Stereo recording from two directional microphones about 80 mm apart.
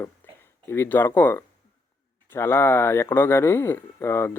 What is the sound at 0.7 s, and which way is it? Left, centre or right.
Speech, left.